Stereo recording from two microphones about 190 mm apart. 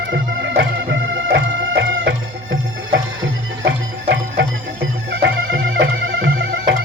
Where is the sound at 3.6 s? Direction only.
70° right (ahead or behind).